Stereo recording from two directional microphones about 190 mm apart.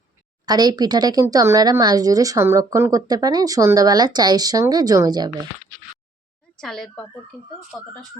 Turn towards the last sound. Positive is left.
turn(degrees=5)  # may be behind; listen again after turning